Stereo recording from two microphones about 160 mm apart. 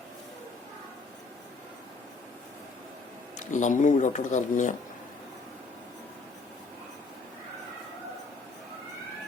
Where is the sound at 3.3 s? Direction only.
50° left (ahead or behind).